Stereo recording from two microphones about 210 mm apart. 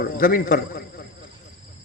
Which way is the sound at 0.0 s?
45° left (ahead or behind).